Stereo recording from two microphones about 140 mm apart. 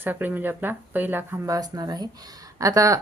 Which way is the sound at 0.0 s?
15° right (ahead or behind).